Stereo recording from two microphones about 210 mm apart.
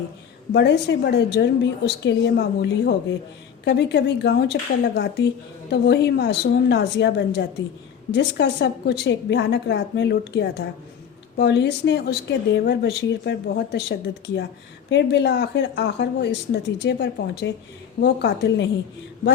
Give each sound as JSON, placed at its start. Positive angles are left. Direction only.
{"t": 0.5, "sound": "a woman's voice", "side_deg": 55}